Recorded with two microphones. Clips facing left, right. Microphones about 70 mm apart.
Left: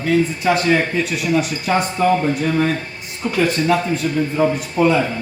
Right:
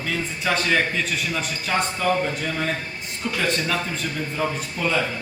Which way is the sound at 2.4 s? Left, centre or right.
Centre.